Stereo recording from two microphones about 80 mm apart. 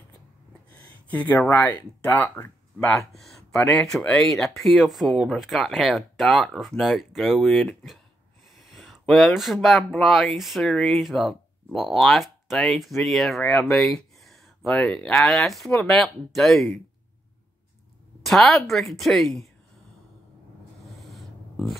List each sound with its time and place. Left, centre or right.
0.7 s speech: centre
3.1 s speech: centre
13.6 s a sound: centre
14.8 s speech: centre
15.1 s speech: centre
18.2 s speech: centre
21.1 s a sound: centre